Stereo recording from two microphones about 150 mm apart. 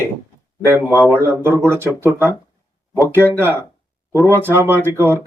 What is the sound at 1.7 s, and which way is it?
Speech, 15° right (ahead or behind).